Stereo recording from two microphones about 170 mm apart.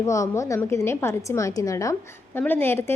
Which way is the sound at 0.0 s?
15° left (ahead or behind).